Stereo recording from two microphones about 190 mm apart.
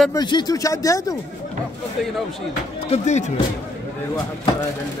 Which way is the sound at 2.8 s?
35° left (ahead or behind).